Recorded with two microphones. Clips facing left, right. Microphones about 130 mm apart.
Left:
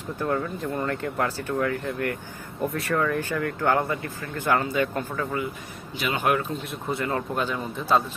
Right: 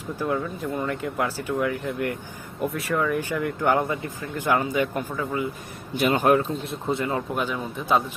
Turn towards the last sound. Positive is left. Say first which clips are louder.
# even
turn(degrees=-10)  # may be behind; listen again after turning